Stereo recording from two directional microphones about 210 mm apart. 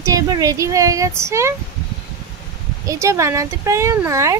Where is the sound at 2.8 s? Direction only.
15° right (ahead or behind).